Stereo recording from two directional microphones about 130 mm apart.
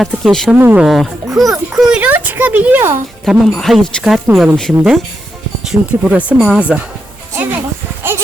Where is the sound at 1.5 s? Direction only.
5° right (ahead or behind).